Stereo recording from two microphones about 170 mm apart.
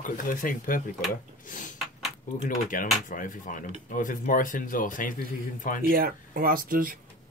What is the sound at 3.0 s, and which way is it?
Speech, 50° left (ahead or behind).